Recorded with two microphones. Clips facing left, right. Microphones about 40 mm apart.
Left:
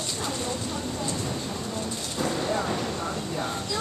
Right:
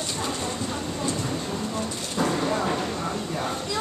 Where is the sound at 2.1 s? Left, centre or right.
Right.